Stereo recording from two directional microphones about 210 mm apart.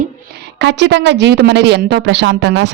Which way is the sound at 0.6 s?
60° right (ahead or behind).